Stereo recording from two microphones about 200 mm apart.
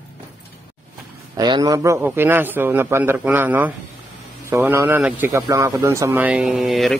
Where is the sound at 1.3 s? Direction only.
20° right (ahead or behind).